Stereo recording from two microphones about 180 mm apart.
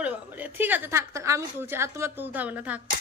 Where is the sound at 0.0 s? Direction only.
10° right (ahead or behind).